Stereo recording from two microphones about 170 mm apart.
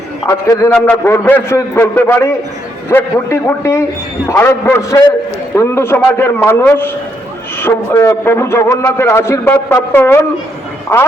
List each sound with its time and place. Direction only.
0.3 s a man's voice: 15° left (ahead or behind)